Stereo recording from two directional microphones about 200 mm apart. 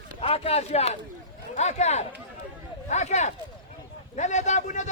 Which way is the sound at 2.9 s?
35° left (ahead or behind).